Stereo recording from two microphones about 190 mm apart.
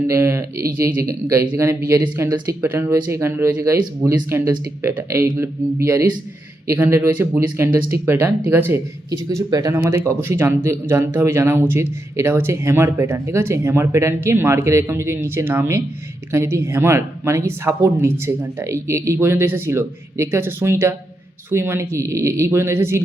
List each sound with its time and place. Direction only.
0.1 s speech: 15° right (ahead or behind)